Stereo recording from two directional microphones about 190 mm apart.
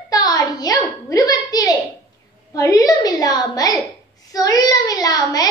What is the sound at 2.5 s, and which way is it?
A woman's voice, 20° left (ahead or behind).